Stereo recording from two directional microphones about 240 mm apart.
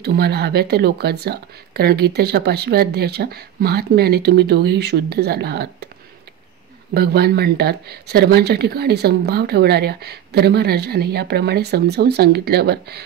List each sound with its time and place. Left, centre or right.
0.0 s speech: right
6.9 s speech: right